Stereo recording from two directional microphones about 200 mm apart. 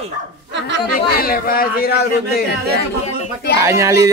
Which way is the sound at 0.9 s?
45° left (ahead or behind).